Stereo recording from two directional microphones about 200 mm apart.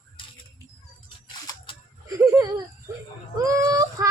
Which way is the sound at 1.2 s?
20° left (ahead or behind).